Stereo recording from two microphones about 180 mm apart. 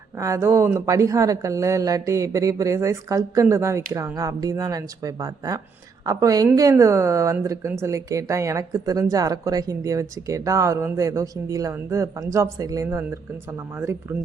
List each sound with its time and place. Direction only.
0.2 s a woman's voice: 15° right (ahead or behind)